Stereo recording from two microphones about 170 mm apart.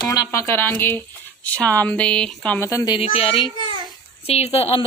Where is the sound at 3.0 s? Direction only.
35° left (ahead or behind).